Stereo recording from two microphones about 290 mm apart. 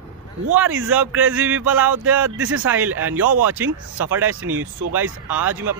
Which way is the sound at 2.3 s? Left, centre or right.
Right.